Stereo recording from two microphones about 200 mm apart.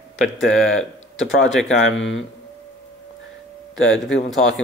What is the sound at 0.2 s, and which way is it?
Speech, centre (ahead or behind).